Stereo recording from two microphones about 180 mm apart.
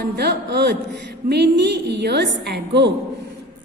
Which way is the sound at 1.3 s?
70° right (ahead or behind).